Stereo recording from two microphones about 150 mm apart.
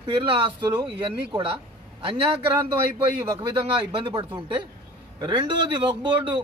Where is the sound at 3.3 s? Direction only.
35° right (ahead or behind).